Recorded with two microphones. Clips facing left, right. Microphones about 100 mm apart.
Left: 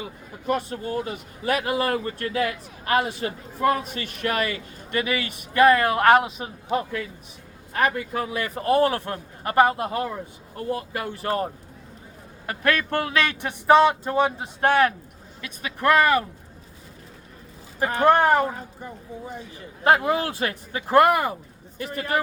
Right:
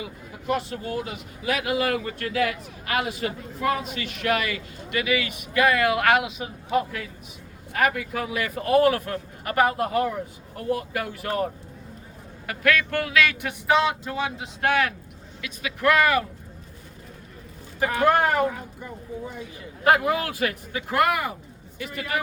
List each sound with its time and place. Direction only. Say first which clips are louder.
0.9 s speech: left 2 dB; 40° left (ahead or behind)
12.5 s speech: even; 35° left (ahead or behind)
17.7 s speech: left 2 dB; 35° left (ahead or behind)